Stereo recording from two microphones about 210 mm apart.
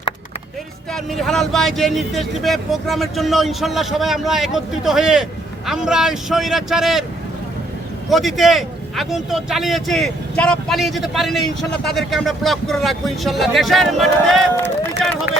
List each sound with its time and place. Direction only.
0.9 s speech: centre (ahead or behind)
8.1 s speech: centre (ahead or behind)